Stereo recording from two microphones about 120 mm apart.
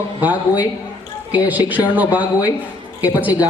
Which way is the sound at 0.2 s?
15° right (ahead or behind).